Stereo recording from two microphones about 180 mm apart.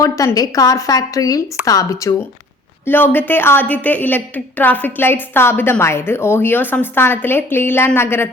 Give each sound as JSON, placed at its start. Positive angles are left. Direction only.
{"t": 0.0, "sound": "a woman's voice", "side_deg": 20}